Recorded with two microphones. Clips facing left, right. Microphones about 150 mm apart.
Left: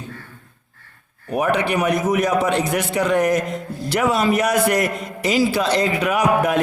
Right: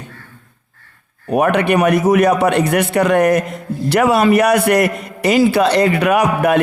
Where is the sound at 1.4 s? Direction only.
60° right (ahead or behind).